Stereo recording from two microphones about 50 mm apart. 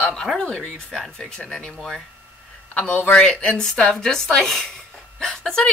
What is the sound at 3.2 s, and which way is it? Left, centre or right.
Speech, centre.